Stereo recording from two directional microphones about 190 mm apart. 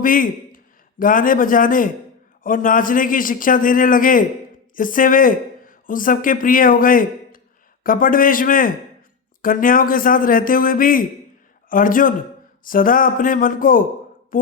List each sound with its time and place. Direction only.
0.0 s a man's voice: 45° left (ahead or behind)